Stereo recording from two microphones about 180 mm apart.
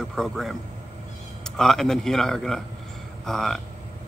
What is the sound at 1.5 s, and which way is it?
Speech, centre (ahead or behind).